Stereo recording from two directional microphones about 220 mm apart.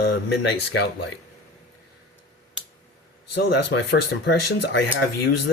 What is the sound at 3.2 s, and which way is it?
Speech, 50° left (ahead or behind).